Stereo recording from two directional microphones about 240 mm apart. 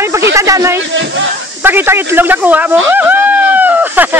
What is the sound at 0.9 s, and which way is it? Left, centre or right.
Speech, right.